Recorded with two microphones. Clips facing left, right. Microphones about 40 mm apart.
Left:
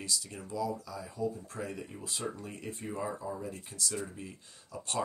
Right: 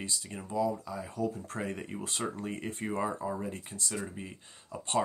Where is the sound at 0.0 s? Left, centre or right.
Right.